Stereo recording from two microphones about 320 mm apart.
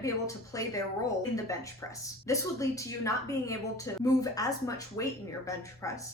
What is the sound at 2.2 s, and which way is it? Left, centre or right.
A woman's voice, centre.